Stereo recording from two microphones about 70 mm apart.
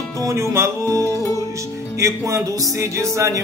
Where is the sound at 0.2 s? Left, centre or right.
Right.